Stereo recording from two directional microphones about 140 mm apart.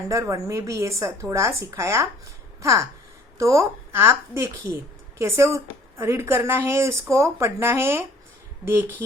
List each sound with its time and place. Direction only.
0.1 s a woman's voice: 20° right (ahead or behind)